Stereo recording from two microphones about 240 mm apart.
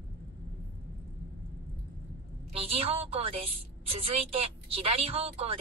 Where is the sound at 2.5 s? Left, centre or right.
Right.